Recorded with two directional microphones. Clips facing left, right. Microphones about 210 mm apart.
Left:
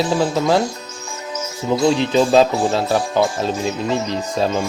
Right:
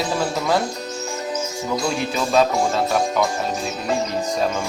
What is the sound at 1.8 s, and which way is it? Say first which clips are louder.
Speech: left 11 dB; 25° left (ahead or behind).